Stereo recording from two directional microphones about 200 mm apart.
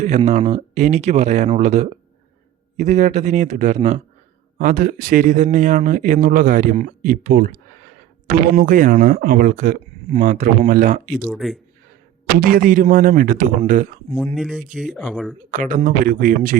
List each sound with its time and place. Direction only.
0.0 s speech: 35° right (ahead or behind)
11.2 s speech: centre (ahead or behind)
12.2 s speech: 45° right (ahead or behind)
14.3 s speech: 5° right (ahead or behind)
15.4 s speech: 40° right (ahead or behind)